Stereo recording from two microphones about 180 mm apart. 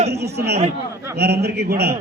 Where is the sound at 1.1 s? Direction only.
65° right (ahead or behind).